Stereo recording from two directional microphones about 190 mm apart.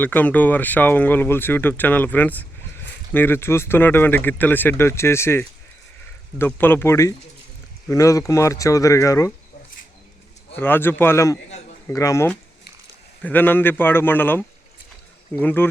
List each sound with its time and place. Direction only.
0.0 s speech: 10° left (ahead or behind)
10.6 s speech: 10° left (ahead or behind)